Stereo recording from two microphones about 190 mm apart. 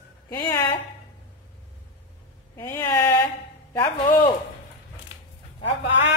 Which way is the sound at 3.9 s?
25° left (ahead or behind).